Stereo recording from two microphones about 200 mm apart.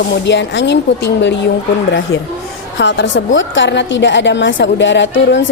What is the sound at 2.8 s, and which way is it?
A woman's voice, 65° left (ahead or behind).